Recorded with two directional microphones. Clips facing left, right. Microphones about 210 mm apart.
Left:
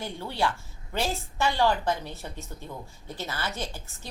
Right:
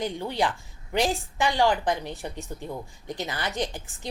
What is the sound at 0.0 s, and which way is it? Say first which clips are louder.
A woman's voice: right 3 dB; 15° right (ahead or behind).